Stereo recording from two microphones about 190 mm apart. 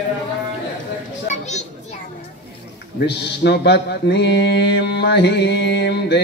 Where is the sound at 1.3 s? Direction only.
35° left (ahead or behind).